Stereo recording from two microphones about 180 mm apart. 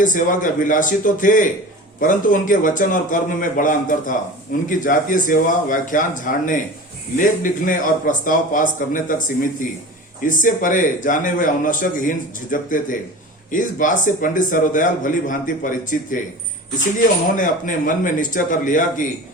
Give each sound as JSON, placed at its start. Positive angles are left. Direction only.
{"t": 0.0, "sound": "a man's voice", "side_deg": 45}
{"t": 17.3, "sound": "a man's voice", "side_deg": 45}